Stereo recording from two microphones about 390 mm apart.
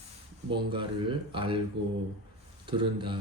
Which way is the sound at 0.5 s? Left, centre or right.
Centre.